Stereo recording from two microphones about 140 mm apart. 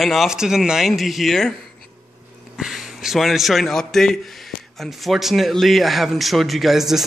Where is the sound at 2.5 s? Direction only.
5° right (ahead or behind).